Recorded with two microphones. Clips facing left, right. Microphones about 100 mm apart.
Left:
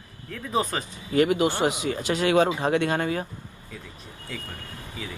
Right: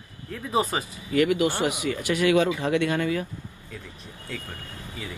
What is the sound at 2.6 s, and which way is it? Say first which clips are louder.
Speech: even; 45° left (ahead or behind).